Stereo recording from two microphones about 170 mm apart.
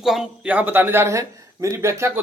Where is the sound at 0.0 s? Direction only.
Centre (ahead or behind).